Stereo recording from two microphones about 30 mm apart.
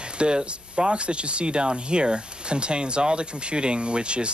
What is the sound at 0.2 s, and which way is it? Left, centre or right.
Speech, right.